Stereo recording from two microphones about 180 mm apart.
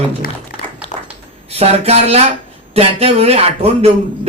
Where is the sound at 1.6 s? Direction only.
35° right (ahead or behind).